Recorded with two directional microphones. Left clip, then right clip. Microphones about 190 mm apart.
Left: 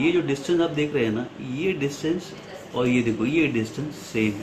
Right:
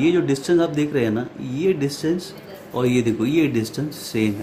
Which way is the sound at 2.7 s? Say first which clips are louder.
Right 3 dB; 70° right (ahead or behind).